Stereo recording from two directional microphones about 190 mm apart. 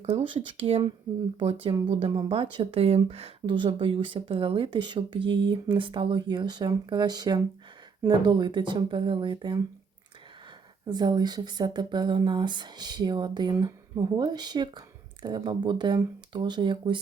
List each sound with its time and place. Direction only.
0.0 s speech: 35° right (ahead or behind)
10.8 s speech: 20° right (ahead or behind)